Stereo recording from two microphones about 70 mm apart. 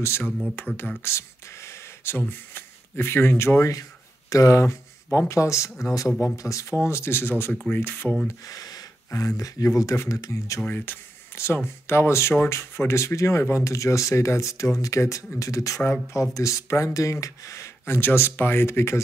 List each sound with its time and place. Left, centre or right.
1.0 s a sound: left
2.1 s speech: left
8.3 s a sound: left
9.4 s speech: left
10.6 s speech: left
11.3 s speech: left
15.8 s speech: left